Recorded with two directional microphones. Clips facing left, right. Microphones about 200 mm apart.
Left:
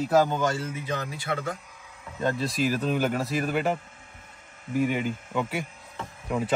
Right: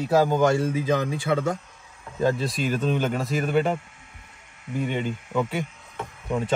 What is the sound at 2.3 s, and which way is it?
A woman's voice, centre (ahead or behind).